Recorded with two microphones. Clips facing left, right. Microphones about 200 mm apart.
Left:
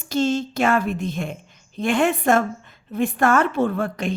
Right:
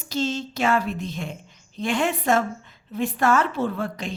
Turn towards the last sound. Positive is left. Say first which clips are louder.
# left 4 dB
turn(degrees=55)  # may be behind; listen again after turning